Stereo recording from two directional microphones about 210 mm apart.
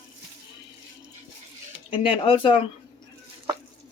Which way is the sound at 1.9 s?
25° left (ahead or behind).